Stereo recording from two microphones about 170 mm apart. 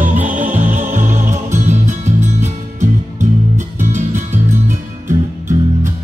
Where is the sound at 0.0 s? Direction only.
50° right (ahead or behind).